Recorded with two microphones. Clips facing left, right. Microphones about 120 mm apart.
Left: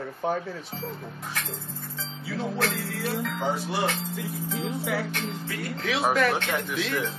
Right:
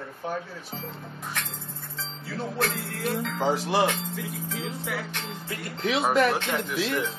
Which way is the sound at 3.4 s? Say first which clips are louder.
Right 8 dB; 90° right.